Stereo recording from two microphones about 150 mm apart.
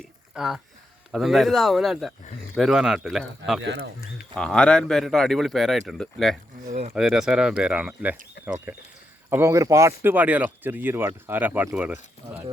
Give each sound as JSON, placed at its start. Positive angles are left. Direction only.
{"t": 0.3, "sound": "speech", "side_deg": -5}